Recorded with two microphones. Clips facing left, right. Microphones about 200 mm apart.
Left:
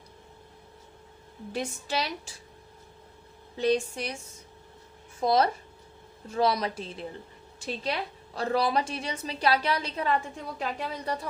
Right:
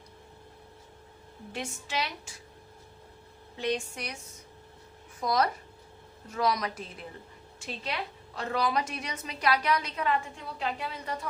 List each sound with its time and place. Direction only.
1.5 s a woman's voice: 35° left (ahead or behind)
3.6 s a woman's voice: 35° left (ahead or behind)
5.2 s a woman's voice: 25° left (ahead or behind)
8.4 s a woman's voice: 35° left (ahead or behind)